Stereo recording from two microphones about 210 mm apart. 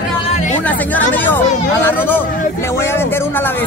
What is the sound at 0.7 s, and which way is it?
Speech, 10° left (ahead or behind).